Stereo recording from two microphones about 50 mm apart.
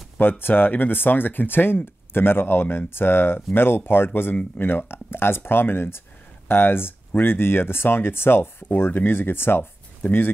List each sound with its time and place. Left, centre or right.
0.2 s speech: left